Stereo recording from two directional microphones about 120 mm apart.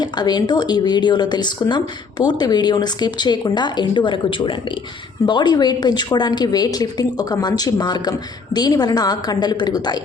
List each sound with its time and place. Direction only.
0.0 s a woman's voice: 35° left (ahead or behind)